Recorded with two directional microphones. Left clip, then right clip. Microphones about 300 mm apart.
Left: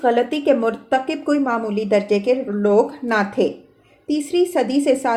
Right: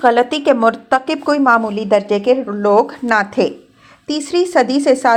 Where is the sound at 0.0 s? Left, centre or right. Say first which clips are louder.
Right 5 dB; right.